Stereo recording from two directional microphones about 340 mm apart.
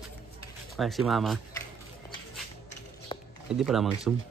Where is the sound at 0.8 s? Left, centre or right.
Centre.